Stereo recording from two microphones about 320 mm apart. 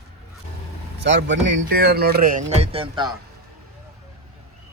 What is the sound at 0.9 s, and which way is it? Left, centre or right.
A man's voice, right.